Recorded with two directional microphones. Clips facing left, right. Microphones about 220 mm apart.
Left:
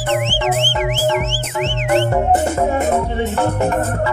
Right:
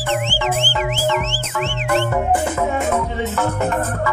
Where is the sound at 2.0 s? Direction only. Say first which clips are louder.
Left 3 dB; 35° left (ahead or behind).